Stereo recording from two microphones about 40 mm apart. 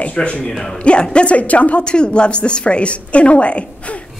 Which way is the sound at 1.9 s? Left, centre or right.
Left.